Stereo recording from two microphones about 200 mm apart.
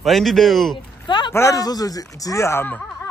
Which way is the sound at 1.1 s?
25° left (ahead or behind).